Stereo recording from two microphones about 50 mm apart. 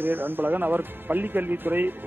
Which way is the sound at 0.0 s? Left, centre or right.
Right.